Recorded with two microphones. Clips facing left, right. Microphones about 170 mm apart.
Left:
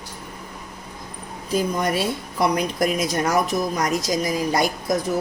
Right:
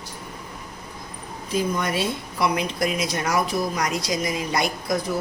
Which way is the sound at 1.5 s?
40° left (ahead or behind).